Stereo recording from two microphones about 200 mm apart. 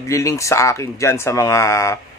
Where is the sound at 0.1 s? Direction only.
15° left (ahead or behind).